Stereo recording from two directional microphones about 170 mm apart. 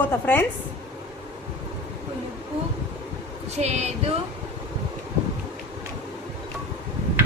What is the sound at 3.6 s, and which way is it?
Speech, 40° right (ahead or behind).